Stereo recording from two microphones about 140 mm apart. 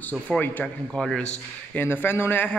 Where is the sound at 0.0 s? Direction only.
10° left (ahead or behind).